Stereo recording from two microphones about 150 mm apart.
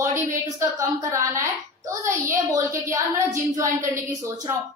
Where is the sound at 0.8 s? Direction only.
20° right (ahead or behind).